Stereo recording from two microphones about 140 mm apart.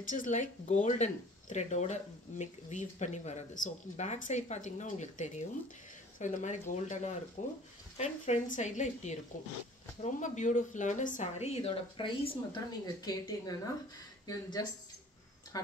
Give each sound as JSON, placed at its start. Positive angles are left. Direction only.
{"t": 0.0, "sound": "speech", "side_deg": 70}
{"t": 12.8, "sound": "speech", "side_deg": 25}